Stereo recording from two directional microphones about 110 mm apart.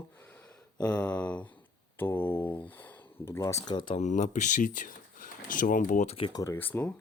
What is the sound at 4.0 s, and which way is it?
Speech, 90° left.